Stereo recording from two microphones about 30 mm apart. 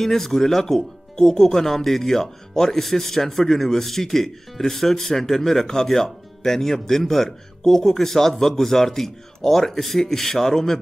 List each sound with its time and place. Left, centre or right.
0.0 s speech: centre
1.1 s speech: centre